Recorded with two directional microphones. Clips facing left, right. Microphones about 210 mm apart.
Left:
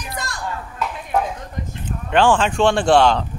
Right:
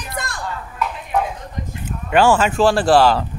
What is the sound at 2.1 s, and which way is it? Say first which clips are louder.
Speech: right 1 dB; 5° right (ahead or behind).